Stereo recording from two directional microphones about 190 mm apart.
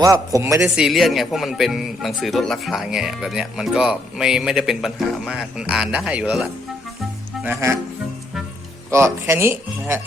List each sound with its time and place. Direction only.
0.0 s speech: 15° right (ahead or behind)
0.6 s speech: centre (ahead or behind)
8.9 s speech: 15° right (ahead or behind)